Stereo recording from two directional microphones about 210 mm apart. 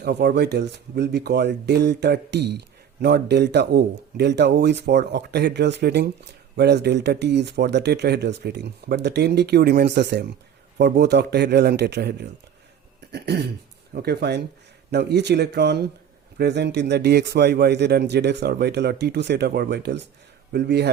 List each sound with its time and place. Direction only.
0.0 s speech: 50° right (ahead or behind)
13.1 s throat clearing: 50° right (ahead or behind)
13.9 s speech: 50° right (ahead or behind)